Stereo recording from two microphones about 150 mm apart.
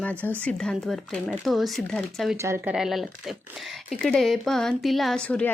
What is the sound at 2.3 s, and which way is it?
Speech, 15° right (ahead or behind).